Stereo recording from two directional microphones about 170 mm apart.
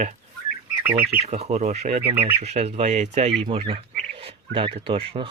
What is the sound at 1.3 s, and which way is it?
Speech, 40° right (ahead or behind).